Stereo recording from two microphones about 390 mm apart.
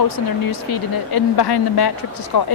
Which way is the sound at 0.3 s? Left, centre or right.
Left.